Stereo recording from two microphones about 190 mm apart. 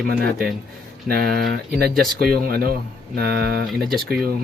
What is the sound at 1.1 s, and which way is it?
Speech, 55° right (ahead or behind).